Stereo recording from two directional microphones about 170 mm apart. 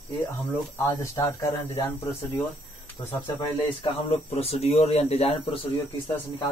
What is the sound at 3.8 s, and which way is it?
Speech, 35° left (ahead or behind).